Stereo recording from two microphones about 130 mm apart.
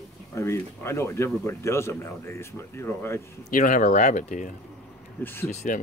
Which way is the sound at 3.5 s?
90° left.